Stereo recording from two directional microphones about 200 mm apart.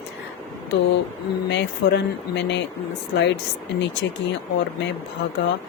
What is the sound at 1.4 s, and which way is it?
Speech, 60° left (ahead or behind).